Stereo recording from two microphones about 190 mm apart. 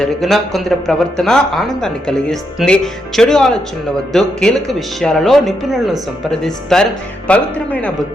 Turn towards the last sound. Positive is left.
turn(degrees=5)  # may be behind; listen again after turning